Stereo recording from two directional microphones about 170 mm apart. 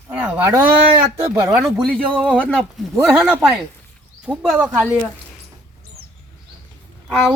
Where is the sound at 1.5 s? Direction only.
5° right (ahead or behind).